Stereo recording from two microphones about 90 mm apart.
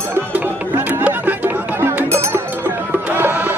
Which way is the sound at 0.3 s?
20° right (ahead or behind).